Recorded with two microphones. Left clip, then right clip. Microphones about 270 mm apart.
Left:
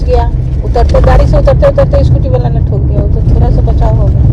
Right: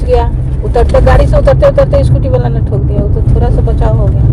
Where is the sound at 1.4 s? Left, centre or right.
Right.